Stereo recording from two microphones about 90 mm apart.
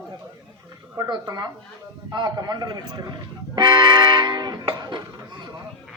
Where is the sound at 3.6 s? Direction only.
55° right (ahead or behind).